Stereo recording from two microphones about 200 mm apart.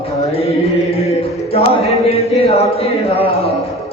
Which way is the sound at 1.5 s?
30° left (ahead or behind).